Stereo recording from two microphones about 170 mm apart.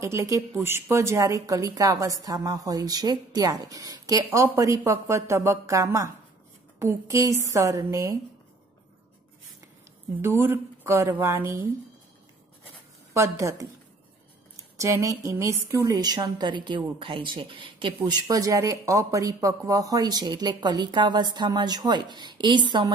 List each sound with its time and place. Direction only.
0.0 s a woman's voice: 20° right (ahead or behind)
10.2 s speech: 15° right (ahead or behind)
13.1 s speech: 15° right (ahead or behind)
14.8 s a woman's voice: 20° right (ahead or behind)